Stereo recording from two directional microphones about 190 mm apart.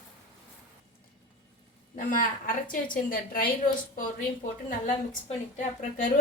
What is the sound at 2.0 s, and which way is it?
Speech, 45° left (ahead or behind).